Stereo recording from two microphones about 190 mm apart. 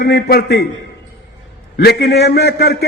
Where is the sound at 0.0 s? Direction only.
55° left (ahead or behind).